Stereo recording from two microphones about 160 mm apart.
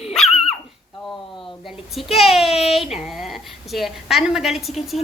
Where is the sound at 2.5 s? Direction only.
40° left (ahead or behind).